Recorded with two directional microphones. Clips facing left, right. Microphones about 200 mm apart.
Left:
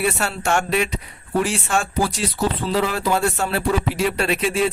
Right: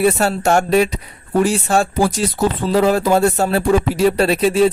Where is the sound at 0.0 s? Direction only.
40° right (ahead or behind).